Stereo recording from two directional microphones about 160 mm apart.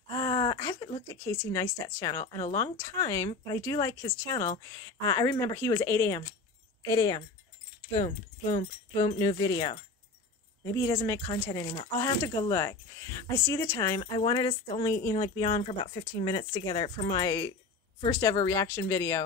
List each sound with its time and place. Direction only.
0.1 s speech: 25° left (ahead or behind)